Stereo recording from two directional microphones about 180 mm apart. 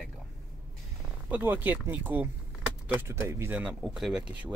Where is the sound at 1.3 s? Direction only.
10° right (ahead or behind).